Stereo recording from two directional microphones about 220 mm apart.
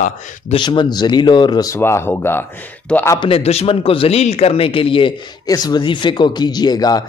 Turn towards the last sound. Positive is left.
turn(degrees=15)  # may be behind; listen again after turning